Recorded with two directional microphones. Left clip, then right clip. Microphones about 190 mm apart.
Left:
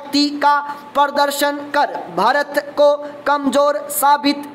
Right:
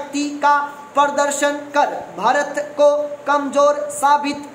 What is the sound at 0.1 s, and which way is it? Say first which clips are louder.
A woman's voice: left 2 dB; 35° left (ahead or behind).